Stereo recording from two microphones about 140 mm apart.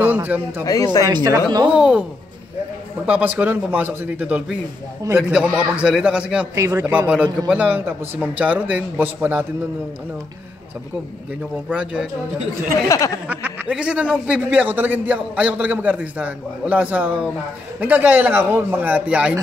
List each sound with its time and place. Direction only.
0.0 s a man's voice: 10° right (ahead or behind)
1.0 s speech: 25° right (ahead or behind)
1.7 s a man's voice: 5° right (ahead or behind)
3.1 s a man's voice: 10° right (ahead or behind)
6.5 s speech: 25° right (ahead or behind)
6.8 s a man's voice: 10° right (ahead or behind)
11.7 s a man's voice: 10° right (ahead or behind)
12.8 s speech: 25° left (ahead or behind)
13.3 s a man's voice: 10° right (ahead or behind)